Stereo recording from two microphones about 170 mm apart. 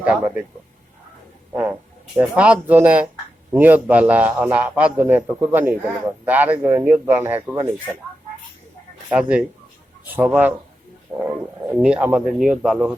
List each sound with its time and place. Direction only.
0.0 s a man's voice: 5° right (ahead or behind)
2.1 s a man's voice: 5° right (ahead or behind)
9.0 s a man's voice: 5° right (ahead or behind)